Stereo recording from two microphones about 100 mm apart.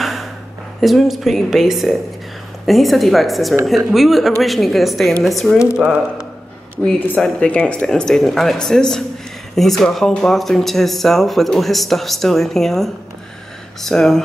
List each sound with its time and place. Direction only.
0.0 s a sound: centre (ahead or behind)
0.7 s speech: centre (ahead or behind)
5.8 s speech: 10° right (ahead or behind)
6.8 s speech: 10° left (ahead or behind)